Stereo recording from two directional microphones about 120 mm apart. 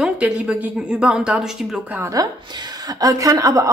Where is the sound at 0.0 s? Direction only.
10° right (ahead or behind).